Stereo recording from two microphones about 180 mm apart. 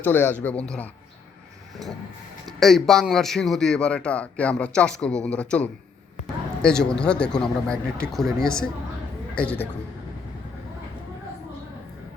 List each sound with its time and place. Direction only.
0.0 s speech: 10° left (ahead or behind)
2.5 s a man's voice: centre (ahead or behind)